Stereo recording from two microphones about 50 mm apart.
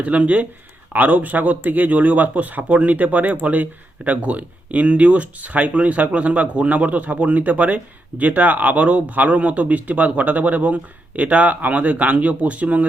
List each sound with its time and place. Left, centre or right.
0.0 s speech: right